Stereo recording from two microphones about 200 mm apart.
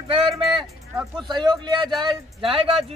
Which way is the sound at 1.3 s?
20° right (ahead or behind).